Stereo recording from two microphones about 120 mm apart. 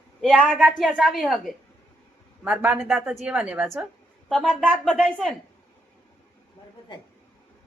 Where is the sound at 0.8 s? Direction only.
5° right (ahead or behind).